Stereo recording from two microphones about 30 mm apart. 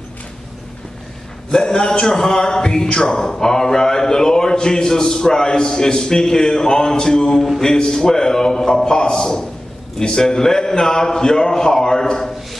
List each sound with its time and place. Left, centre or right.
1.5 s a man's voice: left